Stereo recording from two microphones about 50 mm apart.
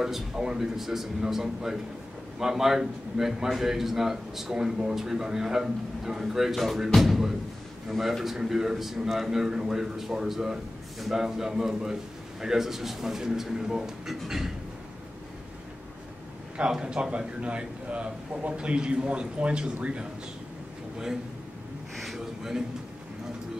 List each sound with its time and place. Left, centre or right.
0.0 s a man's voice: centre
16.5 s a man's voice: centre
21.9 s a sound: centre